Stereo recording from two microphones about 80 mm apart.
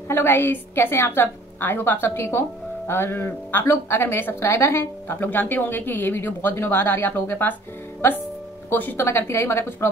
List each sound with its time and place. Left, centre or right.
0.1 s a woman's voice: left